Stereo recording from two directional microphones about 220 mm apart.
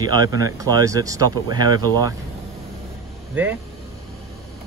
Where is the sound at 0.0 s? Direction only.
15° right (ahead or behind).